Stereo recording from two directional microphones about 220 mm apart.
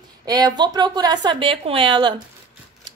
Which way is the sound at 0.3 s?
20° right (ahead or behind).